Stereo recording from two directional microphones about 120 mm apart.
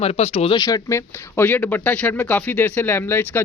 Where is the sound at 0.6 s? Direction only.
30° left (ahead or behind).